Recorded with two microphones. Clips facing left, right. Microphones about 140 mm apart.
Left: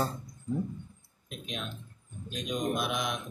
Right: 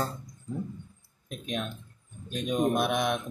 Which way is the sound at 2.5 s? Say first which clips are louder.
Right 6 dB; 50° right (ahead or behind).